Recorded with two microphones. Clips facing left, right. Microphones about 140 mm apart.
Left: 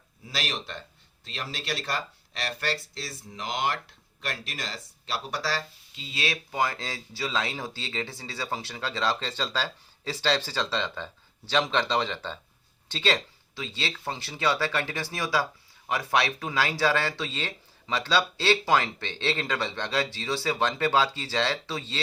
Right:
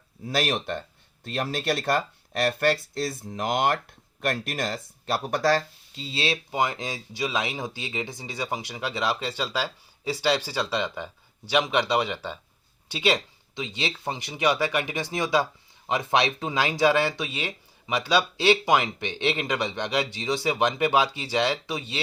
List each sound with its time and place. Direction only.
0.3 s speech: 55° right (ahead or behind)
6.1 s speech: 25° right (ahead or behind)